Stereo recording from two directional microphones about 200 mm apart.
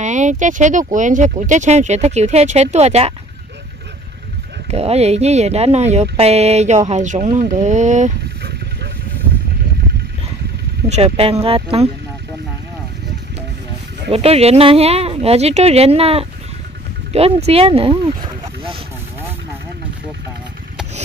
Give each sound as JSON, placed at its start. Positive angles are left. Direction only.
{"t": 0.0, "sound": "speech", "side_deg": -35}
{"t": 4.6, "sound": "speech", "side_deg": -30}
{"t": 10.9, "sound": "speech", "side_deg": -30}
{"t": 14.1, "sound": "speech", "side_deg": -30}